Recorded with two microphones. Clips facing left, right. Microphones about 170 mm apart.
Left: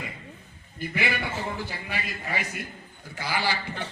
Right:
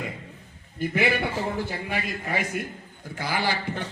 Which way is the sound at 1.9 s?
50° right (ahead or behind).